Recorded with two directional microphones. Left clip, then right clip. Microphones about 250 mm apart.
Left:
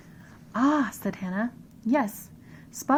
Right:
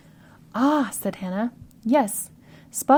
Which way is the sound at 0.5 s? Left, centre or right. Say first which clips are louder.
Right 3 dB; right.